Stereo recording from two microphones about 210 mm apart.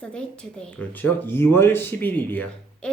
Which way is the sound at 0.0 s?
5° left (ahead or behind).